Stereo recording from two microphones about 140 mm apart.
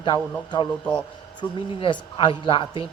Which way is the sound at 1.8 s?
35° left (ahead or behind).